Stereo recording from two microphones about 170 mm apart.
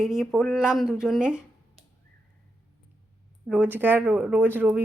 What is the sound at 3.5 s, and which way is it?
Speech, 10° right (ahead or behind).